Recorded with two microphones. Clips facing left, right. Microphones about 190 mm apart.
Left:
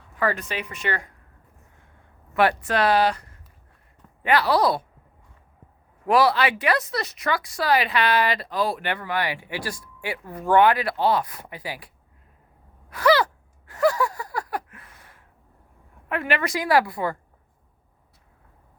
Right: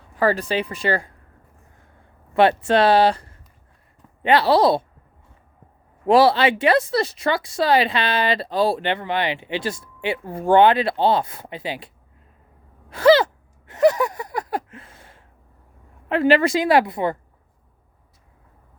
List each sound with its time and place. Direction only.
0.2 s speech: 30° right (ahead or behind)
2.3 s speech: 25° right (ahead or behind)
6.1 s speech: 25° right (ahead or behind)
12.9 s gasp: 25° right (ahead or behind)
16.0 s speech: 30° right (ahead or behind)